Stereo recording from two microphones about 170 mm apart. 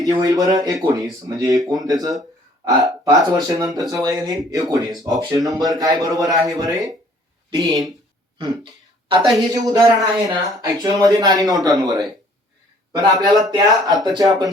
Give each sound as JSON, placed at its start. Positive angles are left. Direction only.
{"t": 0.0, "sound": "speech", "side_deg": -20}
{"t": 7.6, "sound": "speech", "side_deg": 0}
{"t": 8.4, "sound": "a sound", "side_deg": -30}
{"t": 9.5, "sound": "speech", "side_deg": -20}
{"t": 13.2, "sound": "speech", "side_deg": -20}